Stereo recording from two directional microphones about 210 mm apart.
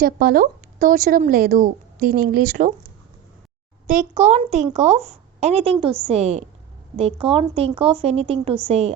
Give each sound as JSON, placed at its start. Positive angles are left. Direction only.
{"t": 0.0, "sound": "a woman's voice", "side_deg": -45}
{"t": 3.8, "sound": "a woman's voice", "side_deg": -35}